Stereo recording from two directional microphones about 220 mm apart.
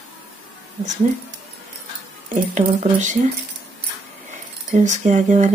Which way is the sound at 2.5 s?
35° right (ahead or behind).